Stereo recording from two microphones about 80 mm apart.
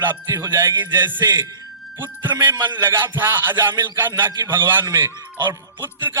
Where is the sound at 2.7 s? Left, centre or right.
Right.